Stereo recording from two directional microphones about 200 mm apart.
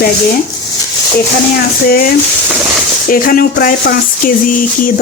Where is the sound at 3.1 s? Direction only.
45° left (ahead or behind).